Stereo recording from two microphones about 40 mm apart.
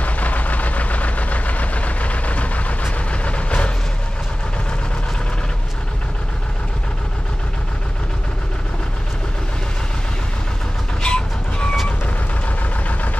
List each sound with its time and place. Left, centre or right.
0.0 s vehicle: left
11.0 s train: left
12.4 s vehicle: left